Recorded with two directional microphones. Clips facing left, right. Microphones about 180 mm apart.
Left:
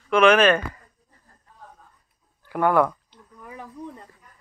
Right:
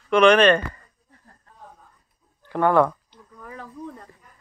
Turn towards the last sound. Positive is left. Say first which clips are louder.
# right 1 dB
turn(degrees=15)  # may be behind; listen again after turning